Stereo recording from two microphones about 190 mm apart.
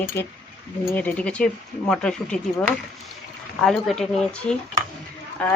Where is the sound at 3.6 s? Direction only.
Centre (ahead or behind).